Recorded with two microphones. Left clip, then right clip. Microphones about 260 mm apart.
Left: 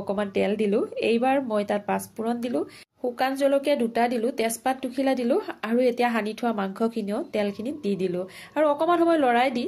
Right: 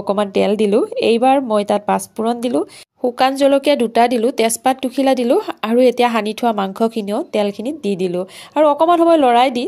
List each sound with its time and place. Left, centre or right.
0.0 s a woman's voice: right